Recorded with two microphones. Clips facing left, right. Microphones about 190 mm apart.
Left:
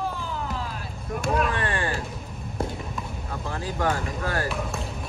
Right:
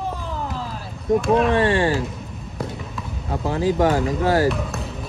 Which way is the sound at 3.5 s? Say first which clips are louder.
Right 9 dB; 20° right (ahead or behind).